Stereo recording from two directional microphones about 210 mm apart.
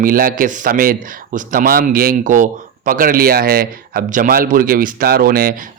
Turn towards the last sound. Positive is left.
turn(degrees=-45)  # may be behind; listen again after turning